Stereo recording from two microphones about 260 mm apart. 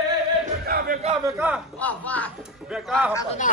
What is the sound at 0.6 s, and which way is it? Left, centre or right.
Speech, right.